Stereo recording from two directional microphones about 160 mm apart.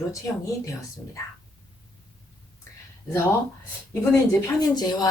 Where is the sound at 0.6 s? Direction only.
20° left (ahead or behind).